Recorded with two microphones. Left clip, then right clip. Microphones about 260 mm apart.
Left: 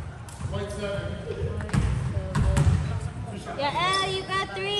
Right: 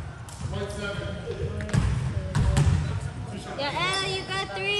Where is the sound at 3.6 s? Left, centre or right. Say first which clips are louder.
Left 2 dB; left.